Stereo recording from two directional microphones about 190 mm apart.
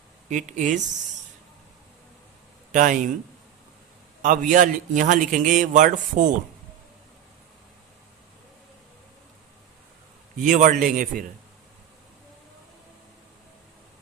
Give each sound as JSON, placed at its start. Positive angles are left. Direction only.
{"t": 0.3, "sound": "speech", "side_deg": -40}
{"t": 2.7, "sound": "speech", "side_deg": -40}
{"t": 4.2, "sound": "a man's voice", "side_deg": -45}
{"t": 10.4, "sound": "a man's voice", "side_deg": -45}